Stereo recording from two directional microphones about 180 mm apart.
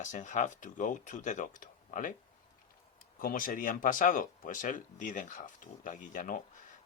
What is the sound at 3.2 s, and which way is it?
Speech, 50° left (ahead or behind).